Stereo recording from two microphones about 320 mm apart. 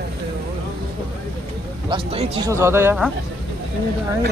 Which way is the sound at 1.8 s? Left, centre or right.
Centre.